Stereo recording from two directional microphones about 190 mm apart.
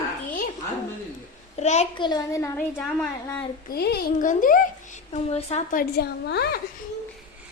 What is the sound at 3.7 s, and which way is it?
A woman's voice, 55° left (ahead or behind).